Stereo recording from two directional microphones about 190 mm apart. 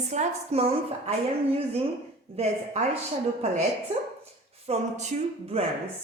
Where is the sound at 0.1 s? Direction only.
35° right (ahead or behind).